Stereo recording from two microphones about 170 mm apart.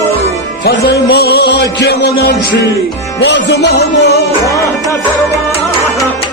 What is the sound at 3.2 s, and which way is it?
Music, 80° left.